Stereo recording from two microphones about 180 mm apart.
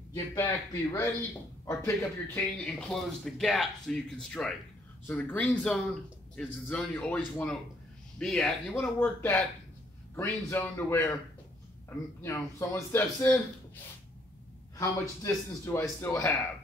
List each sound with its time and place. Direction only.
0.1 s speech: 20° left (ahead or behind)
1.7 s a man's voice: 15° left (ahead or behind)
12.2 s speech: 15° left (ahead or behind)
14.8 s speech: 15° left (ahead or behind)